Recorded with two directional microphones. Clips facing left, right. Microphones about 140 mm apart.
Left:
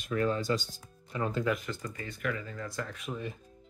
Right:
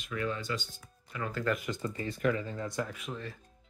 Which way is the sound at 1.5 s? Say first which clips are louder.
Right 2 dB; 15° right (ahead or behind).